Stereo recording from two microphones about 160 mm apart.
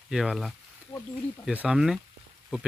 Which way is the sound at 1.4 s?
5° right (ahead or behind).